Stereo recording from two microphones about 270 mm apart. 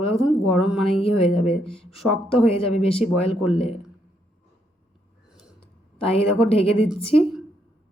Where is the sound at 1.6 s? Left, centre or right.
Centre.